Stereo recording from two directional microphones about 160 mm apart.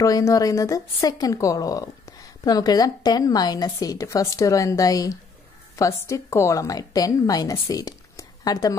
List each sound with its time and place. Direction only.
0.0 s a woman's voice: 20° left (ahead or behind)